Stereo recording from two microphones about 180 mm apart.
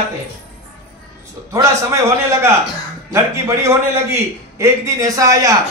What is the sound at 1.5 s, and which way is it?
Speech, 15° right (ahead or behind).